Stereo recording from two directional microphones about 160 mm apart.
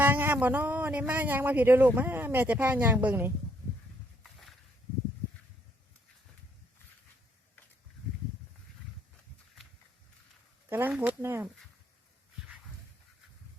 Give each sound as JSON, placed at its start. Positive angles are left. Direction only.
{"t": 0.0, "sound": "speech", "side_deg": -10}
{"t": 4.2, "sound": "a sound", "side_deg": 0}
{"t": 10.7, "sound": "speech", "side_deg": -15}